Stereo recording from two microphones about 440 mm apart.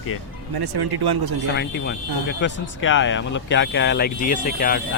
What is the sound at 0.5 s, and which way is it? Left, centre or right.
Speech, right.